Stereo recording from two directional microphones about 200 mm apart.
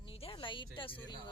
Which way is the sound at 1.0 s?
25° left (ahead or behind).